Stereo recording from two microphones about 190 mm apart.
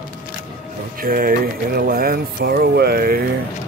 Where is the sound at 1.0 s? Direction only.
50° right (ahead or behind).